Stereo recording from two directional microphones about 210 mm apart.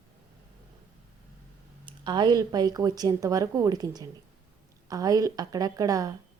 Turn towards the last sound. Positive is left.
turn(degrees=-15)  # may be behind; listen again after turning